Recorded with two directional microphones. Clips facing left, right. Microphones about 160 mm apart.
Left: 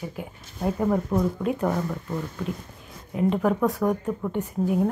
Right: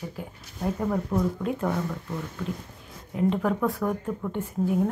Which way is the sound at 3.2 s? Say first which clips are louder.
Left 2 dB; 15° left (ahead or behind).